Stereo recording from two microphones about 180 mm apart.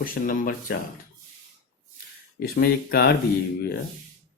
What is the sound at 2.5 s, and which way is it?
Speech, 60° left (ahead or behind).